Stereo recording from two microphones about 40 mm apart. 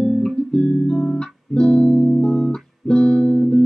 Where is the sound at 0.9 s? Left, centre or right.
Centre.